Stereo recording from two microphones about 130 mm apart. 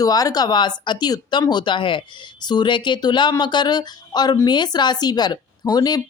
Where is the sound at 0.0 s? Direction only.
30° left (ahead or behind).